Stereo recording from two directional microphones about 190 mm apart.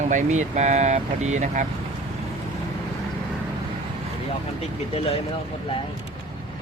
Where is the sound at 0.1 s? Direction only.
40° right (ahead or behind).